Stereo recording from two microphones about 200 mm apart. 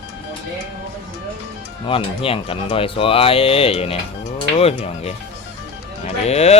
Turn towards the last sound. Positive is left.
turn(degrees=30)  # may be behind; listen again after turning